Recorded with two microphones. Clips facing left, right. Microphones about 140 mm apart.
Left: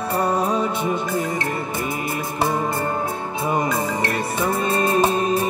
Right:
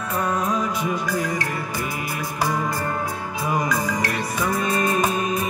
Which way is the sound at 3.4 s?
25° left (ahead or behind).